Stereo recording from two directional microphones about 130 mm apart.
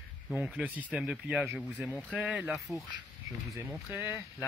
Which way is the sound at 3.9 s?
15° right (ahead or behind).